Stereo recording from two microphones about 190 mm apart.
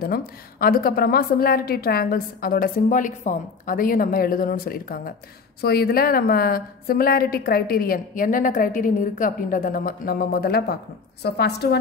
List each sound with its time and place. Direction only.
0.0 s a woman's voice: 50° left (ahead or behind)